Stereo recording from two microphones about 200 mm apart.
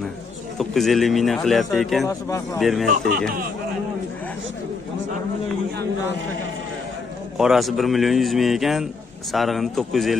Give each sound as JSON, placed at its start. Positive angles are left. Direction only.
{"t": 0.6, "sound": "a man's voice", "side_deg": 0}
{"t": 2.0, "sound": "speech", "side_deg": 15}
{"t": 2.6, "sound": "a man's voice", "side_deg": 0}
{"t": 2.9, "sound": "speech", "side_deg": -45}
{"t": 7.3, "sound": "a man's voice", "side_deg": 0}